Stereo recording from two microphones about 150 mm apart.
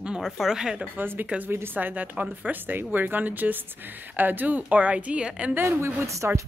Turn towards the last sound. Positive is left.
turn(degrees=-20)  # may be behind; listen again after turning